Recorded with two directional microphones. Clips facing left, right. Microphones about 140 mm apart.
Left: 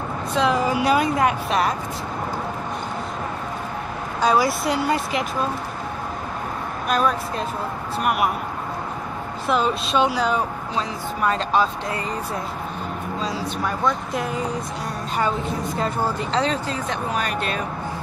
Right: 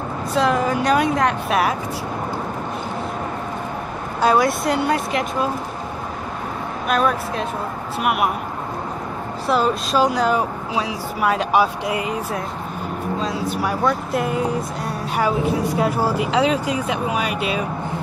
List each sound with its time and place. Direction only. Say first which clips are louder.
0.3 s speech: right 2 dB; centre (ahead or behind)
4.2 s speech: right 2 dB; centre (ahead or behind)
6.9 s speech: right 2 dB; centre (ahead or behind)
9.5 s speech: right 2 dB; 5° right (ahead or behind)
13.2 s speech: right 2 dB; centre (ahead or behind)